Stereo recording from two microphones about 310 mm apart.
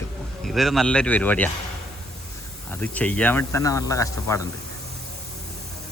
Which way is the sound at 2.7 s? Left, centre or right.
Centre.